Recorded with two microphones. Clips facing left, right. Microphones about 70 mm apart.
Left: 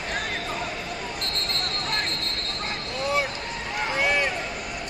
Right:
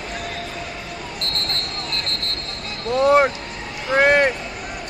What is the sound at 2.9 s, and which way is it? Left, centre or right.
Vehicle, right.